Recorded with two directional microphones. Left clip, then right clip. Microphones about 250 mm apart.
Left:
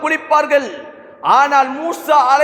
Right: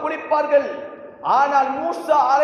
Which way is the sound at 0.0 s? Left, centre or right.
Left.